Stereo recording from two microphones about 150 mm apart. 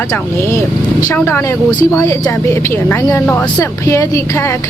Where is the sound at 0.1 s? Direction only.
15° left (ahead or behind).